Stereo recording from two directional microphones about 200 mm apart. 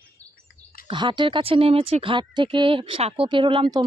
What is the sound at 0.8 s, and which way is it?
Speech, 25° right (ahead or behind).